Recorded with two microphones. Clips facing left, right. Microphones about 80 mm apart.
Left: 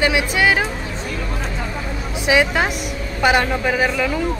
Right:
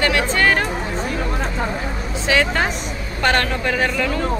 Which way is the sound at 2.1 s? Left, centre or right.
Centre.